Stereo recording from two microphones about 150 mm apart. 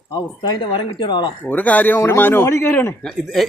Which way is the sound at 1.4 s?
10° left (ahead or behind).